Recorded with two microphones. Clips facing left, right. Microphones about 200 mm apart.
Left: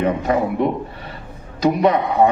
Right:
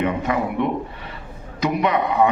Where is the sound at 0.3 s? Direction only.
35° left (ahead or behind).